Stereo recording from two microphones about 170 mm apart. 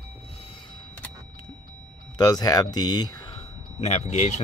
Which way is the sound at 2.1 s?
25° left (ahead or behind).